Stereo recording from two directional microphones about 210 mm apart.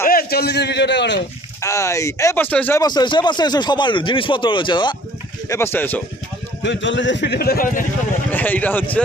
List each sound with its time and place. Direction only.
0.1 s a man's voice: 45° left (ahead or behind)
1.6 s speech: 15° left (ahead or behind)
6.6 s a man's voice: 60° left (ahead or behind); by 7.9 s 40° left (ahead or behind)
8.3 s a man's voice: 10° left (ahead or behind)